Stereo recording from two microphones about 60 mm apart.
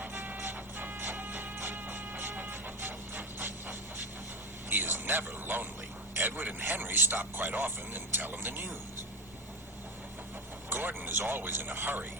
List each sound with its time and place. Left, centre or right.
0.0 s music: right
4.7 s a sound: right
6.1 s a man's voice: right
10.7 s a man's voice: right